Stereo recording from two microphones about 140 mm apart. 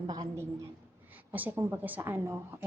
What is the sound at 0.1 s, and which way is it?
Speech, 30° right (ahead or behind).